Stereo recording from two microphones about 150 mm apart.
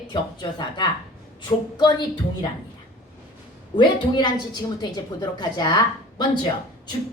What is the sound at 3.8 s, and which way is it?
A woman's voice, 30° left (ahead or behind).